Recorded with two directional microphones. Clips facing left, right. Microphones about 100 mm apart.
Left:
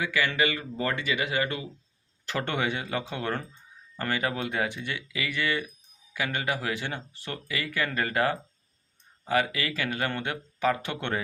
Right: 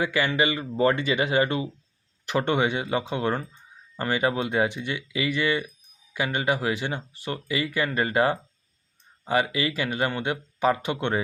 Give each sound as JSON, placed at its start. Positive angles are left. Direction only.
{"t": 0.0, "sound": "speech", "side_deg": -30}